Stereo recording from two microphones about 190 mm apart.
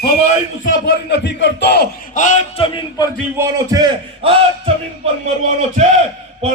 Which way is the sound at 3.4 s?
20° right (ahead or behind).